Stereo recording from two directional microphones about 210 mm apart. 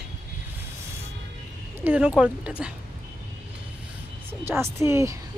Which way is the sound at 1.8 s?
5° right (ahead or behind).